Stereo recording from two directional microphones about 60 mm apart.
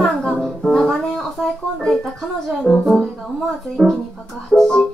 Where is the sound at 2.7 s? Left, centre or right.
Centre.